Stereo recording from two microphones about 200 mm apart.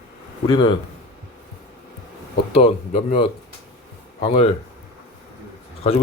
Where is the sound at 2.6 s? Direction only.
30° left (ahead or behind).